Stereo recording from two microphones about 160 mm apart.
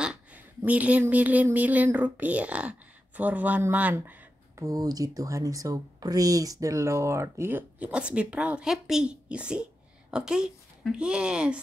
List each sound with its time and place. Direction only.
0.0 s speech: 5° right (ahead or behind)